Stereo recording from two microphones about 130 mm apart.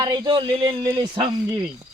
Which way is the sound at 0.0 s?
35° right (ahead or behind).